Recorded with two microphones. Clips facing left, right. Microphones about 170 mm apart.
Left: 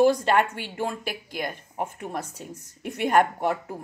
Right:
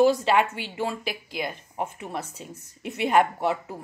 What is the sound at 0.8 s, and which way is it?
Speech, 50° left (ahead or behind).